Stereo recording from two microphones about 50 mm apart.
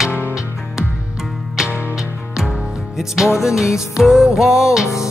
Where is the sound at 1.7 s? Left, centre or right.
Right.